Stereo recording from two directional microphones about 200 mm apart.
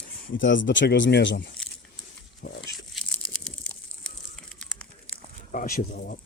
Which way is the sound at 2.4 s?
60° left (ahead or behind).